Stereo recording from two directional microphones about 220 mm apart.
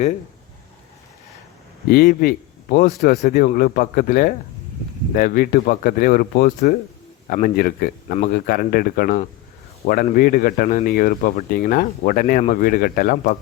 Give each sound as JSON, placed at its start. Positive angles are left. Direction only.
{"t": 1.9, "sound": "a man's voice", "side_deg": 40}